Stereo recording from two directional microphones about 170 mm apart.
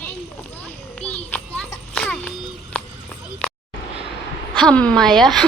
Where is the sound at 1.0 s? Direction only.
5° left (ahead or behind).